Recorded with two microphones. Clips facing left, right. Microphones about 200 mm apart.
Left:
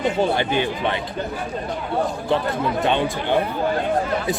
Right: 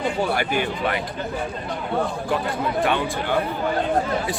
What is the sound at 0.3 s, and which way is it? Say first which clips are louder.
Speech: left 2 dB; 25° left (ahead or behind).